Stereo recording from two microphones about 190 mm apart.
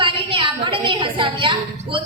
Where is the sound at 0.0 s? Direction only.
25° right (ahead or behind).